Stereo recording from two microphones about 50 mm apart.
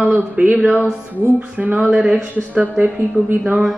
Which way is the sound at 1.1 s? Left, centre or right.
Right.